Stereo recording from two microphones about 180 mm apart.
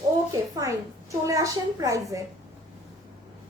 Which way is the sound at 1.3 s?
20° right (ahead or behind).